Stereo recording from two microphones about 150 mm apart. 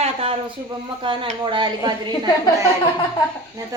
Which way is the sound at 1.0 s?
35° right (ahead or behind).